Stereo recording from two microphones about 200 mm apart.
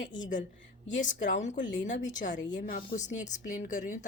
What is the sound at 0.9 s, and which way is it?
A woman's voice, 40° left (ahead or behind).